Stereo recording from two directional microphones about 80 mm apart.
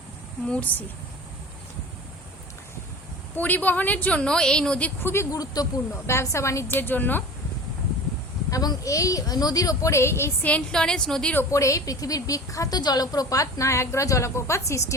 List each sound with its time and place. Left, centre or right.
0.4 s a woman's voice: centre
3.3 s a woman's voice: left
5.0 s a woman's voice: left
5.3 s a woman's voice: left
6.1 s a woman's voice: left
8.4 s a woman's voice: left
10.4 s a woman's voice: centre
11.5 s a woman's voice: left